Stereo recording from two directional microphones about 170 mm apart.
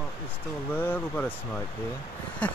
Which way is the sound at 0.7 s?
10° left (ahead or behind).